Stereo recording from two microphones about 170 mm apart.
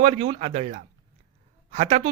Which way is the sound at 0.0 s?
40° right (ahead or behind).